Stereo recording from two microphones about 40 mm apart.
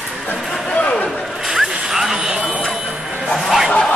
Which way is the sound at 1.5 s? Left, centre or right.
Centre.